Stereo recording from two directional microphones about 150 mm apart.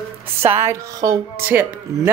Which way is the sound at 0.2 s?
40° right (ahead or behind).